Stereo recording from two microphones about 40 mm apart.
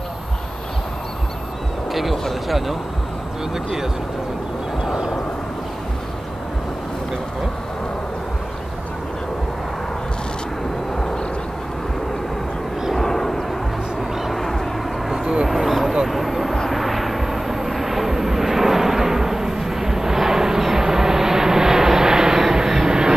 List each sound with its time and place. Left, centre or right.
1.9 s a sound: centre
2.2 s speech: centre
4.8 s vehicle: centre
12.9 s vehicle: centre
14.1 s vehicle: centre
15.4 s a sound: centre
16.1 s vehicle: centre